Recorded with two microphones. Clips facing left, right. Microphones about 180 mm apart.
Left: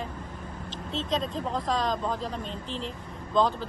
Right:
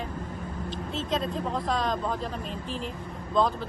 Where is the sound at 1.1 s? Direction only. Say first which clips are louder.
Right 1 dB; centre (ahead or behind).